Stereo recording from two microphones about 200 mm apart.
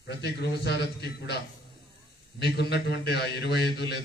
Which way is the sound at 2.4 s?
55° left (ahead or behind).